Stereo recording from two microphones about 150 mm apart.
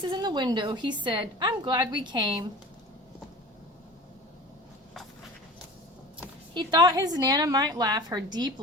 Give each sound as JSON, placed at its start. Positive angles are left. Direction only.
{"t": 0.0, "sound": "a woman's voice", "side_deg": -30}
{"t": 6.5, "sound": "a woman's voice", "side_deg": -30}